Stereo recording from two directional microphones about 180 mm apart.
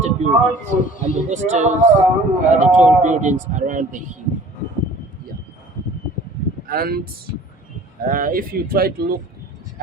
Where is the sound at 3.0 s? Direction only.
45° right (ahead or behind).